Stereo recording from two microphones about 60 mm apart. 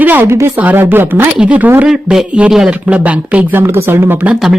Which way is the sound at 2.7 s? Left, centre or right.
Right.